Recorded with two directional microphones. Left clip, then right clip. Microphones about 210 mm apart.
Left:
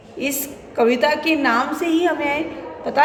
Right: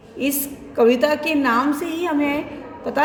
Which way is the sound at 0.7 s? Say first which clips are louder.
Right 1 dB; 25° right (ahead or behind).